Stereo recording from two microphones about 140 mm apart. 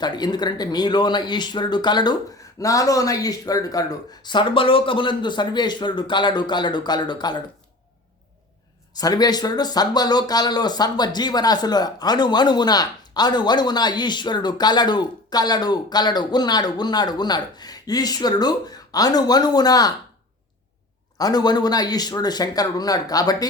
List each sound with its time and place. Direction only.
0.0 s speech: 30° left (ahead or behind)
9.0 s speech: 25° left (ahead or behind)
21.2 s speech: 30° left (ahead or behind)